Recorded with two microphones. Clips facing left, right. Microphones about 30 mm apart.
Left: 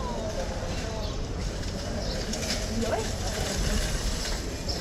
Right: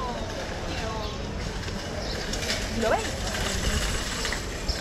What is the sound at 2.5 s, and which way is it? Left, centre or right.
Vehicle, right.